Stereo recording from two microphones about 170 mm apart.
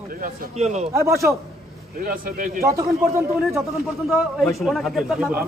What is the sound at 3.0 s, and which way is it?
Speech, 15° right (ahead or behind).